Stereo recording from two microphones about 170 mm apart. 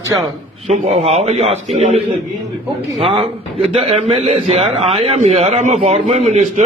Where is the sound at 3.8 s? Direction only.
40° right (ahead or behind).